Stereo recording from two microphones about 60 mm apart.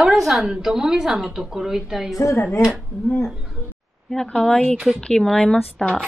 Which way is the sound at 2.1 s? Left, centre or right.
Left.